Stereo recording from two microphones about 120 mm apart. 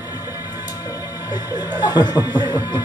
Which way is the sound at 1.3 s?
35° left (ahead or behind).